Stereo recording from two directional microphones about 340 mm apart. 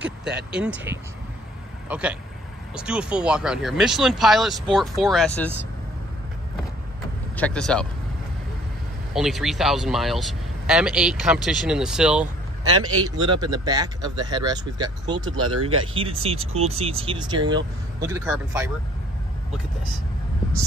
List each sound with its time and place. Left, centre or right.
0.5 s a man's voice: centre
7.3 s a man's voice: centre
9.1 s a man's voice: centre
12.9 s a man's voice: right
13.4 s speech: centre
15.3 s speech: right
15.9 s speech: centre